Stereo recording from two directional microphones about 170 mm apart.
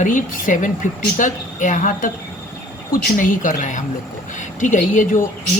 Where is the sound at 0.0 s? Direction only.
50° left (ahead or behind).